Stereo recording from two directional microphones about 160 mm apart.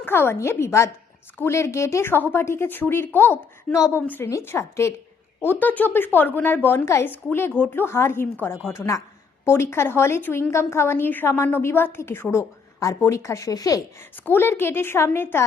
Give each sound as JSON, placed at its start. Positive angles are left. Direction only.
{"t": 0.0, "sound": "a woman's voice", "side_deg": 15}